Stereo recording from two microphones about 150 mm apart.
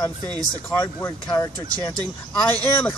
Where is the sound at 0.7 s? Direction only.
15° left (ahead or behind).